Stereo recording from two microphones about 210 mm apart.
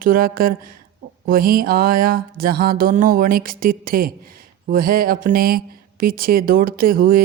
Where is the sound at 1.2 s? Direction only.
45° right (ahead or behind).